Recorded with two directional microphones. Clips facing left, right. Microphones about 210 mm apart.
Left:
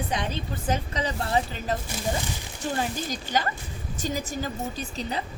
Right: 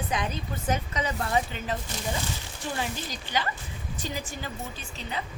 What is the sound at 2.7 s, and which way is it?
A woman's voice, 45° left (ahead or behind).